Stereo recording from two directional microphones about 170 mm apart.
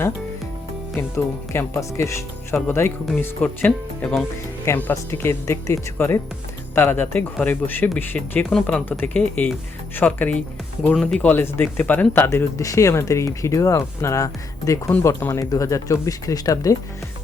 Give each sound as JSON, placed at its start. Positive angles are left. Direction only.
{"t": 0.9, "sound": "speech", "side_deg": 15}